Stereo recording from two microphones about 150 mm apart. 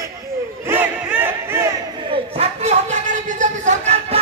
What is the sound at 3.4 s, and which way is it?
Music, 50° right (ahead or behind).